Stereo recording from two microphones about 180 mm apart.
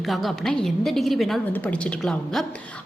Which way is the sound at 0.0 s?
Centre (ahead or behind).